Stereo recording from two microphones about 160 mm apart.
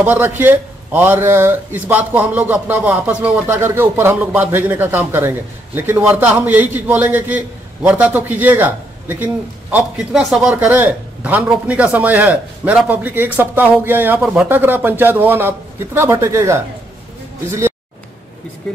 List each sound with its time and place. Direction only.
0.0 s a man's voice: 10° right (ahead or behind)